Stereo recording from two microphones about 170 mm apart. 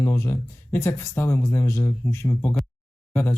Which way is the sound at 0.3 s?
15° left (ahead or behind).